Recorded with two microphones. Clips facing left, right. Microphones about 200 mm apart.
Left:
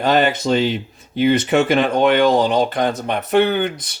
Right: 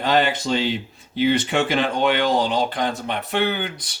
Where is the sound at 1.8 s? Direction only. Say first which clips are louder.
Left 5 dB; 55° left (ahead or behind).